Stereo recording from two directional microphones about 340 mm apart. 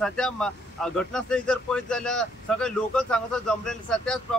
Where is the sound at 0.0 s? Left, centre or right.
Centre.